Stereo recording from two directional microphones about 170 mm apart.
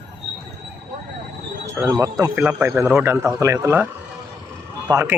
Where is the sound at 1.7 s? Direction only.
15° right (ahead or behind).